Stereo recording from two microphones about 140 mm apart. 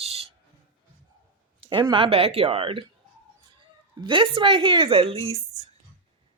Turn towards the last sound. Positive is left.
turn(degrees=-45)  # may be behind; listen again after turning